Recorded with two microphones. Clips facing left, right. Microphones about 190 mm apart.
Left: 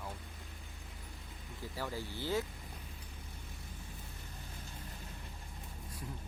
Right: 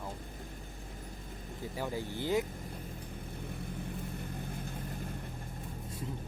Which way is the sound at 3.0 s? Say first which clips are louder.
Right 10 dB; 55° right (ahead or behind).